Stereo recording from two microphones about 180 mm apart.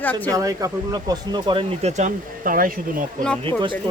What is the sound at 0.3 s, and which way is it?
Speech, 20° right (ahead or behind).